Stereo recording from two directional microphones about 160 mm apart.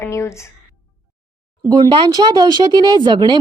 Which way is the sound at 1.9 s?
25° right (ahead or behind).